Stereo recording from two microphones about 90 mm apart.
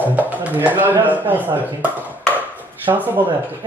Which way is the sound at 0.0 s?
20° right (ahead or behind).